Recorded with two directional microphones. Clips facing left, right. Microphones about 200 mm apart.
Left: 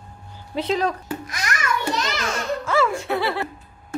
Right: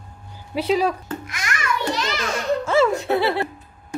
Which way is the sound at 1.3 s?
40° left (ahead or behind).